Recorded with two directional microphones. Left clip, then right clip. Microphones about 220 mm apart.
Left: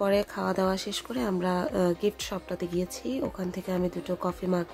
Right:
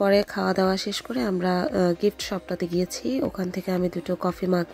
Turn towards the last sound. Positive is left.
turn(degrees=-20)  # may be behind; listen again after turning